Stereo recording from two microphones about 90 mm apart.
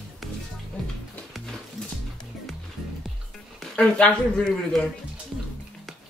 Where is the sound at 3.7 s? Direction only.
10° left (ahead or behind).